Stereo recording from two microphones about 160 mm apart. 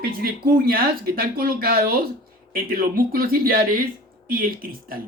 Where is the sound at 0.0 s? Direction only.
70° right (ahead or behind).